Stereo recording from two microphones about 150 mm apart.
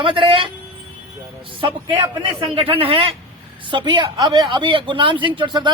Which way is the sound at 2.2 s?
40° right (ahead or behind).